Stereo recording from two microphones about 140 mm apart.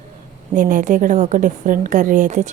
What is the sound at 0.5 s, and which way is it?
A woman's voice, 70° right (ahead or behind).